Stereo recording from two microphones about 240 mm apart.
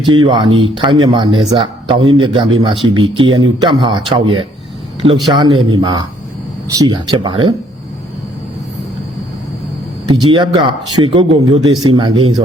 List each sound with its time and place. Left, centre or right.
0.0 s speech: centre
10.1 s speech: centre